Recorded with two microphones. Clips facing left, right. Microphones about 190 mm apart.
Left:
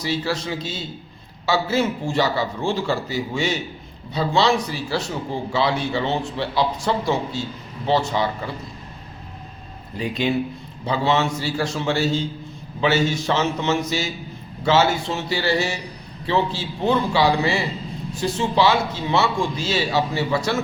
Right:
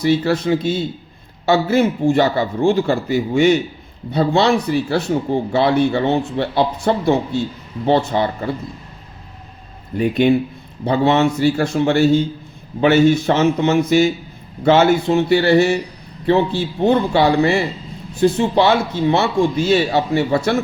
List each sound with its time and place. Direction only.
0.0 s speech: 55° right (ahead or behind)
10.0 s speech: 55° right (ahead or behind)